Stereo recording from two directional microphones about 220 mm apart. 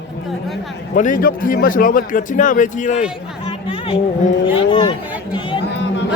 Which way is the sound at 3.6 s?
25° left (ahead or behind).